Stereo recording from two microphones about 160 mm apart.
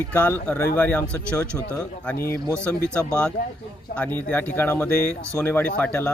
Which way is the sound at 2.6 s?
5° left (ahead or behind).